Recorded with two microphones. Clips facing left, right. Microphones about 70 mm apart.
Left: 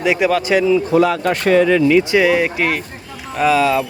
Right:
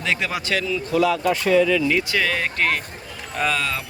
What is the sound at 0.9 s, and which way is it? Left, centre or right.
Speech, left.